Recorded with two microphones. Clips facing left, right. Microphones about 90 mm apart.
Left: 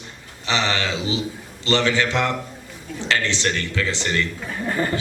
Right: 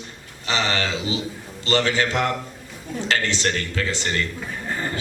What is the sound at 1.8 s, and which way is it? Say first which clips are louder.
Speech: left 1 dB; 40° right (ahead or behind).